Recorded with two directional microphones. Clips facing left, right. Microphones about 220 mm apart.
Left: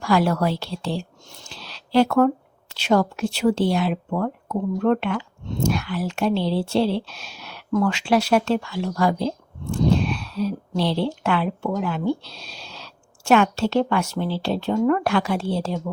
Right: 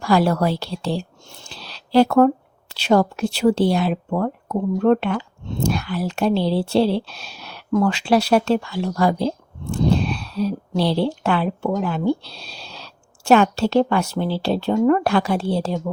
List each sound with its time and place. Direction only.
0.0 s speech: 35° right (ahead or behind)